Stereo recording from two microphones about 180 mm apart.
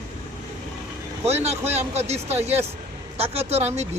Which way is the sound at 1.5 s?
35° right (ahead or behind).